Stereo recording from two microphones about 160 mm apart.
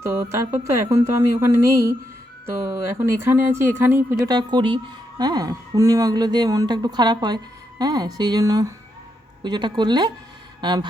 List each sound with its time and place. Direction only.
0.0 s speech: 15° right (ahead or behind)
4.3 s a woman's voice: 25° right (ahead or behind)